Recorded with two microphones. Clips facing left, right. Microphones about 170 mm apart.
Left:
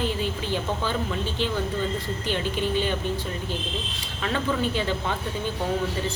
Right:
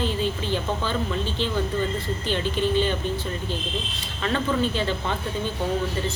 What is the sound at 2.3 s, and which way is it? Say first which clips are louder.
Speech: right 2 dB; 10° left (ahead or behind).